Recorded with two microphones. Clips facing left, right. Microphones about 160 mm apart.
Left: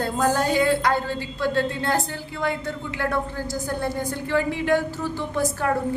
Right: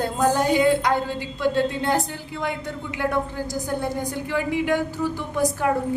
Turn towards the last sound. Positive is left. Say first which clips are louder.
# right 1 dB
turn(degrees=-15)  # may be behind; listen again after turning